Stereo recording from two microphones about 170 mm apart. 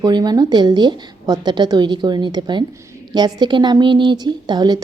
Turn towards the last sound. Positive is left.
turn(degrees=-25)  # may be behind; listen again after turning